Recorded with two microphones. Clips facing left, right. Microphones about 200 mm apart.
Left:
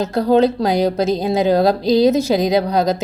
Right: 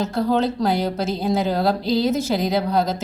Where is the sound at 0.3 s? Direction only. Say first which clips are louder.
Left 9 dB; 15° left (ahead or behind).